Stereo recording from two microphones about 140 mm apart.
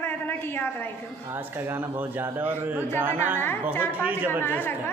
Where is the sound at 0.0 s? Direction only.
15° left (ahead or behind).